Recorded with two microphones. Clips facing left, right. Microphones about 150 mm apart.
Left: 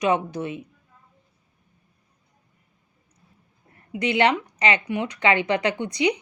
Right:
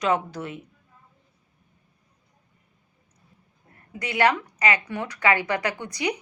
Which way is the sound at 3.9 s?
25° left (ahead or behind).